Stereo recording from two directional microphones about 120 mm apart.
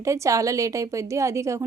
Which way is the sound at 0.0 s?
25° right (ahead or behind).